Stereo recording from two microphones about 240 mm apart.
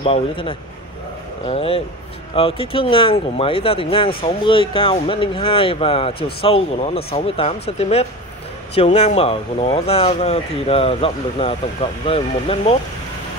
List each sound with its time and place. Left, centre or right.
0.0 s speech: left